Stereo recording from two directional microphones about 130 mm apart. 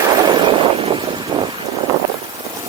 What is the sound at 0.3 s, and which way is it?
Vehicle, 40° right (ahead or behind).